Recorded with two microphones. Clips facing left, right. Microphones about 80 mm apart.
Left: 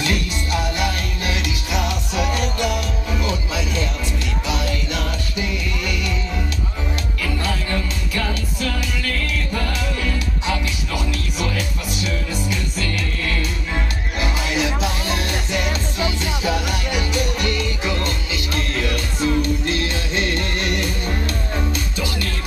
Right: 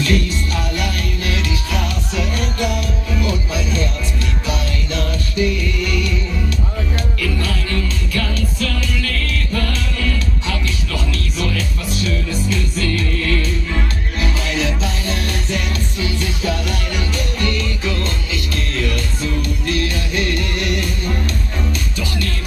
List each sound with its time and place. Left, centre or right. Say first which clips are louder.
0.0 s music: right 4 dB; centre
7.2 s music: even; left